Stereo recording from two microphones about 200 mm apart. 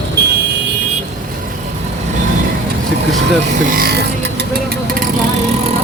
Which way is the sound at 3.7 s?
50° right (ahead or behind).